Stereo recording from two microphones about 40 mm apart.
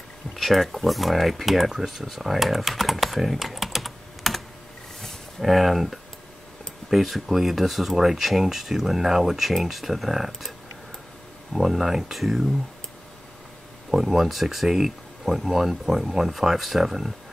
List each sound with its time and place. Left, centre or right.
0.4 s speech: centre
5.0 s a sound: centre
6.9 s speech: centre
11.5 s speech: centre
13.8 s speech: centre